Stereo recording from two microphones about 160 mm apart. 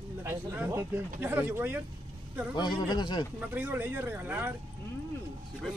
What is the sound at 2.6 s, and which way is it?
Speech, 25° left (ahead or behind).